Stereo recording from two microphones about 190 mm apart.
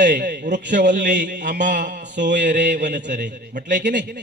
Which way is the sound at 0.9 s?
45° right (ahead or behind).